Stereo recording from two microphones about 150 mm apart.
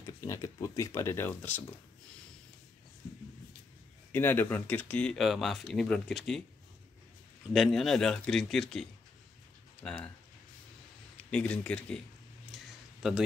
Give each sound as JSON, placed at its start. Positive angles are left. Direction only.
{"t": 0.0, "sound": "speech", "side_deg": 20}
{"t": 4.1, "sound": "speech", "side_deg": 15}
{"t": 7.5, "sound": "a man's voice", "side_deg": 0}
{"t": 9.8, "sound": "a man's voice", "side_deg": 5}
{"t": 11.2, "sound": "speech", "side_deg": 5}
{"t": 12.5, "sound": "a sound", "side_deg": 0}
{"t": 13.0, "sound": "a man's voice", "side_deg": -5}